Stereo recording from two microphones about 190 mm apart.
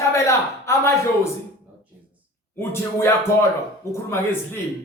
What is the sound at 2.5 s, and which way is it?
Speech, 15° left (ahead or behind).